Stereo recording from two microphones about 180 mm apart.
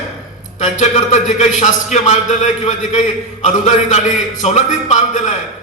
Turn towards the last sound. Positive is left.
turn(degrees=40)  # may be behind; listen again after turning